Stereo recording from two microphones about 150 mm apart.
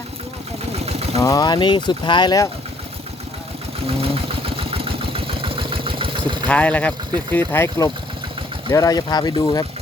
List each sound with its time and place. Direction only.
0.7 s vehicle: 45° right (ahead or behind)
1.2 s speech: 25° left (ahead or behind)
3.8 s engine: 40° right (ahead or behind)
6.5 s speech: 10° left (ahead or behind); by 9.6 s 25° left (ahead or behind)